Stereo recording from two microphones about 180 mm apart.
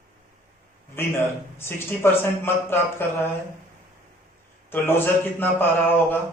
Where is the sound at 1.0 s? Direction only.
15° left (ahead or behind).